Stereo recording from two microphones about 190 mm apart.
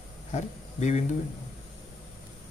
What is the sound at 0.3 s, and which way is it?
Speech, 35° left (ahead or behind).